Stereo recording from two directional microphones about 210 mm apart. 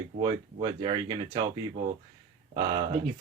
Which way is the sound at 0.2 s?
20° right (ahead or behind).